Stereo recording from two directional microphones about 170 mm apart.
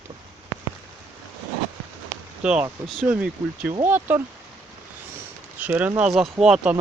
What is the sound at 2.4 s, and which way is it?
Speech, 5° right (ahead or behind).